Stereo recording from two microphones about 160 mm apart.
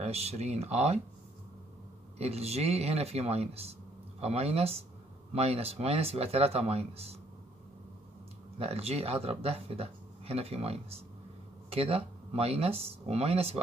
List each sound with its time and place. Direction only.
0.0 s speech: 40° right (ahead or behind)
2.1 s speech: 40° right (ahead or behind)
8.5 s speech: 40° right (ahead or behind)